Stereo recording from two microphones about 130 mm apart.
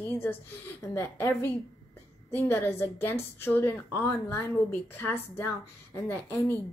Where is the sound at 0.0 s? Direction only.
15° left (ahead or behind).